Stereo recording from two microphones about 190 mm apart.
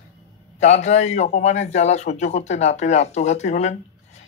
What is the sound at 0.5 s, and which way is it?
A man's voice, 35° left (ahead or behind).